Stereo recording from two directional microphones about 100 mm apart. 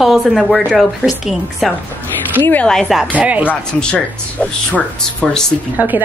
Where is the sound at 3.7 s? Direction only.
10° left (ahead or behind).